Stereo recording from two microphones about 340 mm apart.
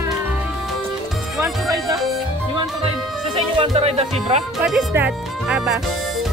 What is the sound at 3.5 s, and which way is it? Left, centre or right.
Music, centre.